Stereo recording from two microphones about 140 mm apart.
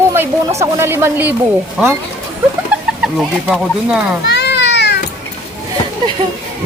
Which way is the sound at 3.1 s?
5° right (ahead or behind).